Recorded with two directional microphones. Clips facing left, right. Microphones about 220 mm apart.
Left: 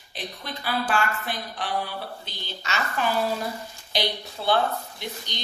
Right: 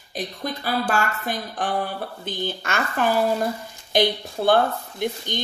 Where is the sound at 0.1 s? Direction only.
45° right (ahead or behind).